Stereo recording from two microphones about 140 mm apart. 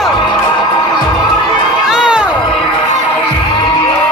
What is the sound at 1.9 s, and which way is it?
Crowd, 5° right (ahead or behind).